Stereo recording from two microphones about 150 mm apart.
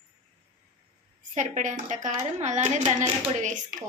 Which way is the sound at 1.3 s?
55° right (ahead or behind).